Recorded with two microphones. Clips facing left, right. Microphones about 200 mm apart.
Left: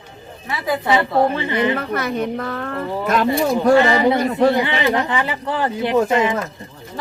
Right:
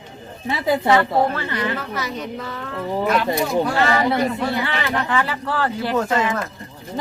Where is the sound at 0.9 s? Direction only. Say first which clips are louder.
Left 1 dB; 15° left (ahead or behind).